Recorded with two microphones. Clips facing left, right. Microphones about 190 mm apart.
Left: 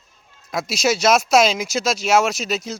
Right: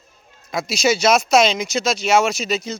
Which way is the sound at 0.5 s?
Centre (ahead or behind).